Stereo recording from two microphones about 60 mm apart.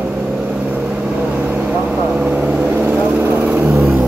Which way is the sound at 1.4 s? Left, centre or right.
Right.